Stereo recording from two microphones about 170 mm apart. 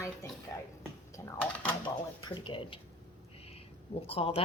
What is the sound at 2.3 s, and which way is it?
Speech, 30° left (ahead or behind).